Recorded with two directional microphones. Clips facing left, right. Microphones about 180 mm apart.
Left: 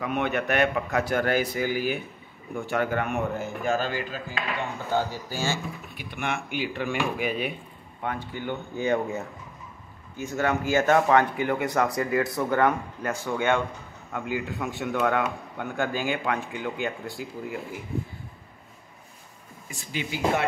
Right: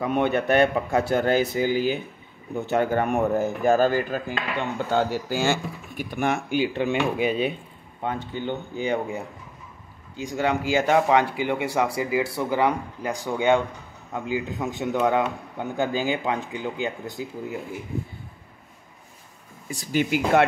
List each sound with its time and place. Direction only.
0.0 s a man's voice: 30° right (ahead or behind); by 4.2 s 45° right (ahead or behind)
4.6 s a man's voice: 70° right (ahead or behind); by 17.6 s 20° right (ahead or behind)
19.7 s speech: 35° right (ahead or behind)